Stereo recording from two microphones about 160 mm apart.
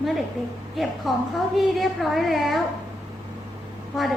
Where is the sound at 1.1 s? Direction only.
Centre (ahead or behind).